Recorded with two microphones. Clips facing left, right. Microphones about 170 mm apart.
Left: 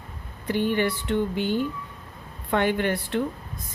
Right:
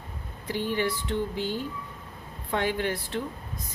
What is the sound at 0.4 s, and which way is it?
A woman's voice, 60° left (ahead or behind).